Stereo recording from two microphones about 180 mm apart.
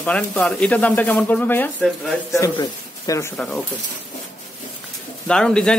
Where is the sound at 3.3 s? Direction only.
5° left (ahead or behind).